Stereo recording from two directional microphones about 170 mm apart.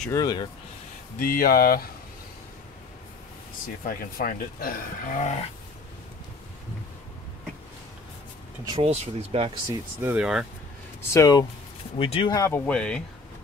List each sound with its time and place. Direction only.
0.1 s speech: 25° left (ahead or behind)
1.2 s speech: 55° left (ahead or behind)
3.8 s speech: 55° left (ahead or behind)
8.8 s speech: 40° right (ahead or behind)
9.7 s speech: 15° right (ahead or behind)
11.0 s speech: 20° left (ahead or behind)
12.0 s speech: 30° left (ahead or behind)
12.4 s speech: 15° left (ahead or behind)